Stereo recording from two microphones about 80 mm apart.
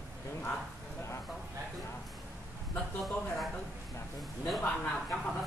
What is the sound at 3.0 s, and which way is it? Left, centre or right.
Speech, centre.